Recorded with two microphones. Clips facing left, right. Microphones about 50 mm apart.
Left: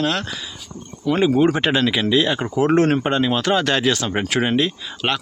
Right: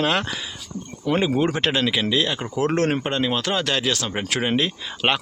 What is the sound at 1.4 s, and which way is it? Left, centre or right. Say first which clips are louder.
Speech: left 4 dB; centre.